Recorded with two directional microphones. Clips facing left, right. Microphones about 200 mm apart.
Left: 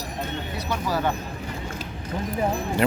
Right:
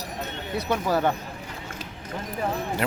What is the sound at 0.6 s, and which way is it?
Speech, 55° right (ahead or behind).